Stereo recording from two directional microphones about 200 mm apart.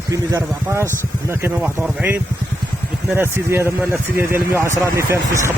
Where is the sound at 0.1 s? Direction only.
15° right (ahead or behind).